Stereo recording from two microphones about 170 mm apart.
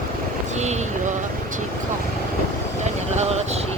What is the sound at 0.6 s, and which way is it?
Vehicle, 40° right (ahead or behind).